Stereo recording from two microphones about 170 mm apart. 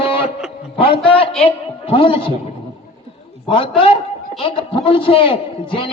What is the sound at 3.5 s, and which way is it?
A man's voice, 30° left (ahead or behind).